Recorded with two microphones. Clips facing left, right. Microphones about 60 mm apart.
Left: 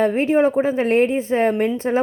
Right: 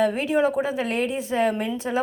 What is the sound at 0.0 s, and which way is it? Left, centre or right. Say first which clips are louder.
A woman's voice: left 4 dB; left.